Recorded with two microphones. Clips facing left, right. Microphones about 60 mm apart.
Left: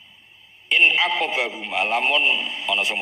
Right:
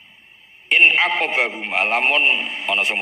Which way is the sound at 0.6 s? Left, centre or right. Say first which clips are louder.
Right 3 dB; right.